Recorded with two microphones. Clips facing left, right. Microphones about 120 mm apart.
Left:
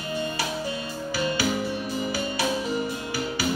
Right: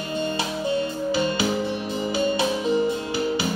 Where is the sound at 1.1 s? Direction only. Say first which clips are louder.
Right 1 dB; 20° right (ahead or behind).